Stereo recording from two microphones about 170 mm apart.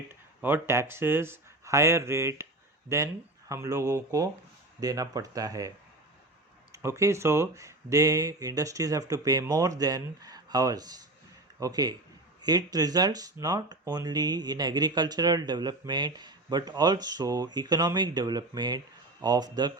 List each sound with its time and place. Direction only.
0.1 s speech: 15° right (ahead or behind)
6.8 s speech: 15° right (ahead or behind)